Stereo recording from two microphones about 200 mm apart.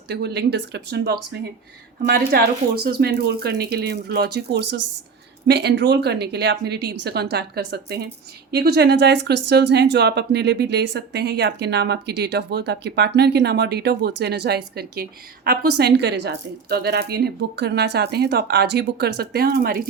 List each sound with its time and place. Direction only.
0.1 s speech: 55° right (ahead or behind)